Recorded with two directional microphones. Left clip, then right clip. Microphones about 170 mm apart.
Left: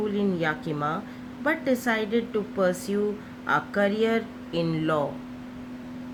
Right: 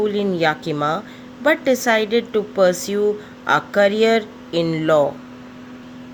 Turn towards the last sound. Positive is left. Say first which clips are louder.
# right 9 dB
turn(degrees=-50)  # may be behind; listen again after turning